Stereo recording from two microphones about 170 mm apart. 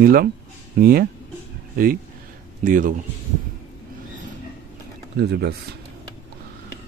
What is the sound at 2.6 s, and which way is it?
Speech, 55° right (ahead or behind).